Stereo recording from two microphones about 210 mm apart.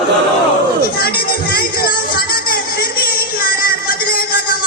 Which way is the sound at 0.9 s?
45° left (ahead or behind).